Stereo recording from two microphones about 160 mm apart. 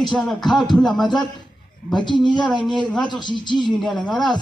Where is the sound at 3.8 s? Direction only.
Centre (ahead or behind).